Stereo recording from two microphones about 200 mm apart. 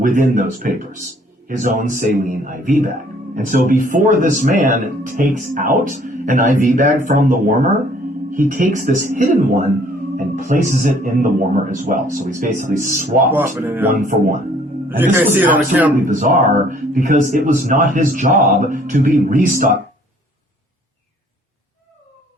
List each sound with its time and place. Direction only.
0.0 s speech: 40° right (ahead or behind)
13.2 s speech: 10° right (ahead or behind)
13.9 s speech: 45° right (ahead or behind)
14.8 s speech: 10° right (ahead or behind)
16.0 s speech: 40° right (ahead or behind)